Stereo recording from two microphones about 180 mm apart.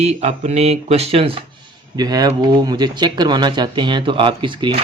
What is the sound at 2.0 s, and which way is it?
Speech, 20° right (ahead or behind).